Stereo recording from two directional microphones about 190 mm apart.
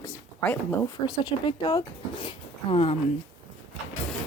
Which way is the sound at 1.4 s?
25° left (ahead or behind).